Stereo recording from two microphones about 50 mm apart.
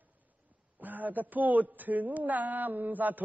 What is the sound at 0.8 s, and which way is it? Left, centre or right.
A woman's voice, right.